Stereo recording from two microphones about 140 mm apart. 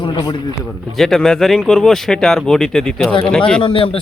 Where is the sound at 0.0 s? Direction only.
30° left (ahead or behind).